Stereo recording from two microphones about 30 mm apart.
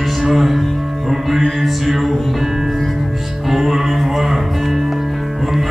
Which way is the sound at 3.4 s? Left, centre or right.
Centre.